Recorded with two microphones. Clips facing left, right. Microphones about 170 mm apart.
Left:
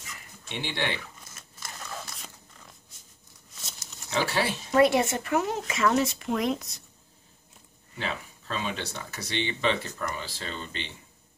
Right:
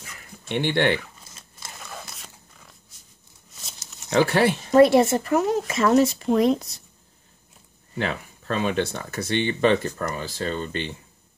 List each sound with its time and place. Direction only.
0.5 s speech: 60° right (ahead or behind)
1.8 s a sound: 5° right (ahead or behind)
4.1 s speech: 60° right (ahead or behind)
4.6 s speech: 40° right (ahead or behind)
8.0 s speech: 60° right (ahead or behind)